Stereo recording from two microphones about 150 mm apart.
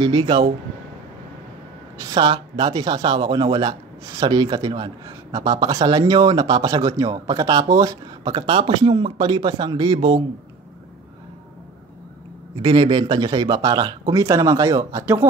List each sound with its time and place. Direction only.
0.0 s a man's voice: 30° right (ahead or behind)
2.0 s a man's voice: 25° right (ahead or behind)
12.6 s speech: 30° right (ahead or behind)